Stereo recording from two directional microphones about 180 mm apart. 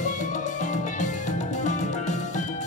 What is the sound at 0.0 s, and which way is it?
Music, 45° left (ahead or behind).